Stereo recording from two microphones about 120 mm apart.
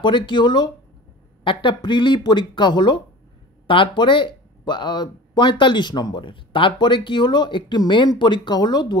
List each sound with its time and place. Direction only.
0.0 s speech: 40° left (ahead or behind)